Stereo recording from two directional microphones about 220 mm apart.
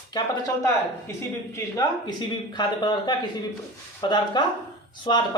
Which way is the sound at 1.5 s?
15° left (ahead or behind).